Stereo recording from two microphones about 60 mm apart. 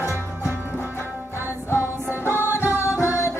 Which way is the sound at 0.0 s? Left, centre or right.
Left.